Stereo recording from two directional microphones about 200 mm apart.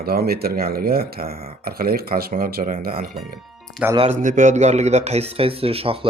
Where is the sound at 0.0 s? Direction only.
50° right (ahead or behind).